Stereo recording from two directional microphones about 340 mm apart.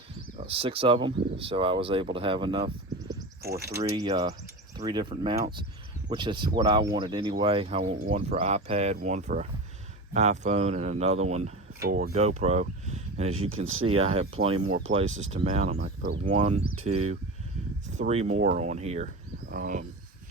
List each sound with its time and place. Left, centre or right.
0.3 s speech: centre